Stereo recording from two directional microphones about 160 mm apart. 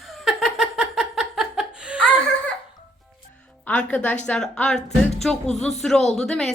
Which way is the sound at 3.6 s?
10° left (ahead or behind).